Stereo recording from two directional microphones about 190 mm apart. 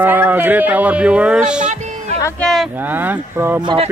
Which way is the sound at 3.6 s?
25° right (ahead or behind).